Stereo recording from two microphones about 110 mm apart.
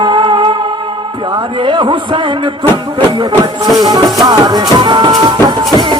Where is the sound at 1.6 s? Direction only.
45° right (ahead or behind).